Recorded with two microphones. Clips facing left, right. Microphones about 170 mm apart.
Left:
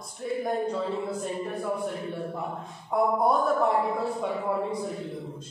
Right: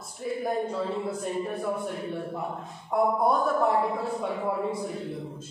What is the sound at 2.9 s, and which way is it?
Speech, centre (ahead or behind).